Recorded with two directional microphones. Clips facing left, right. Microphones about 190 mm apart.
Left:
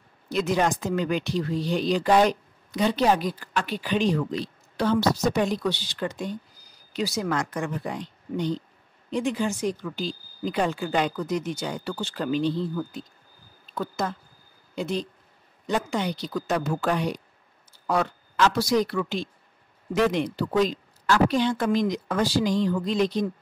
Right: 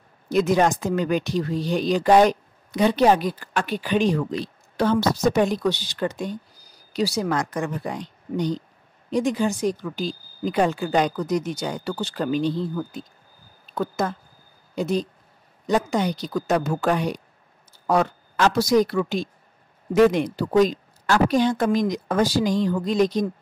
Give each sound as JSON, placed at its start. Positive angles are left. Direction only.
{"t": 0.3, "sound": "speech", "side_deg": -45}